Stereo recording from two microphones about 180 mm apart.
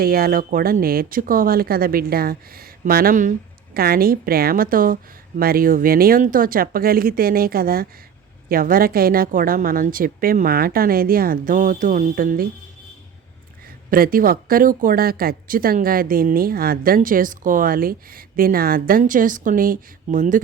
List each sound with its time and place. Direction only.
0.0 s speech: 55° right (ahead or behind)
13.9 s speech: 55° right (ahead or behind)